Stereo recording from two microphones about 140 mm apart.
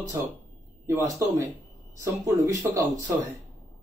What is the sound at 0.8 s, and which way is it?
Speech, 20° right (ahead or behind).